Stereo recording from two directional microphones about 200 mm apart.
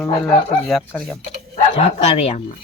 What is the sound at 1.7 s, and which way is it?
Speech, 30° left (ahead or behind).